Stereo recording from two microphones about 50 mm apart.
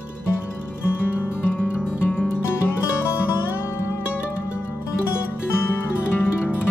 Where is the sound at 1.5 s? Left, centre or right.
Left.